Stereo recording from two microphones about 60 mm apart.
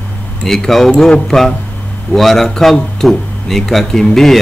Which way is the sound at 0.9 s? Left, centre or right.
Centre.